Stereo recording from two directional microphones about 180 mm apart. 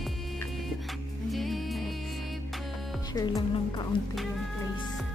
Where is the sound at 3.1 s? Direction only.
20° left (ahead or behind).